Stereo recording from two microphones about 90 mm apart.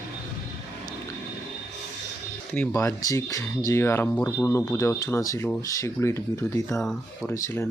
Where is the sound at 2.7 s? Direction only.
35° left (ahead or behind).